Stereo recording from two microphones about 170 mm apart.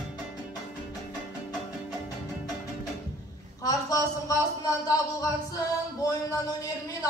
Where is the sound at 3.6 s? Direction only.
20° left (ahead or behind).